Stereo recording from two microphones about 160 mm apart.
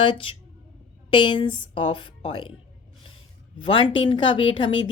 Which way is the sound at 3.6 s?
30° left (ahead or behind).